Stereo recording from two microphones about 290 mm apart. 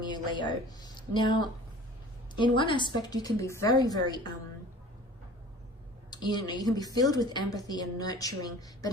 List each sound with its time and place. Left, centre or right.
0.0 s a woman's voice: centre
6.1 s a woman's voice: centre